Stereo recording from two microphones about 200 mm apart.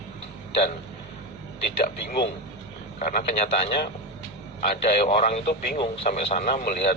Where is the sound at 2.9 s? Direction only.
40° left (ahead or behind).